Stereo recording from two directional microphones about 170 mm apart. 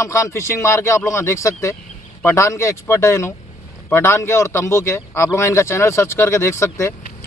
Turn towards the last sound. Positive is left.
turn(degrees=15)  # may be behind; listen again after turning